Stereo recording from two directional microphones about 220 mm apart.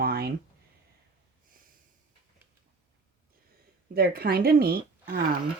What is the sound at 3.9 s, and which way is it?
Speech, 45° right (ahead or behind).